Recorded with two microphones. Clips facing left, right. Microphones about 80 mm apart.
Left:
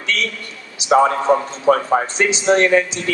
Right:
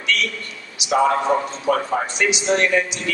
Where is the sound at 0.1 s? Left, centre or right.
Left.